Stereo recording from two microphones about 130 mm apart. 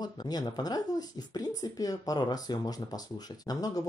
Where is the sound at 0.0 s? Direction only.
30° left (ahead or behind).